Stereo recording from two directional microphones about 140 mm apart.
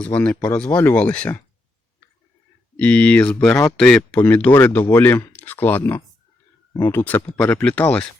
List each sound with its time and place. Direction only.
0.0 s speech: 10° left (ahead or behind)
2.7 s speech: 10° left (ahead or behind)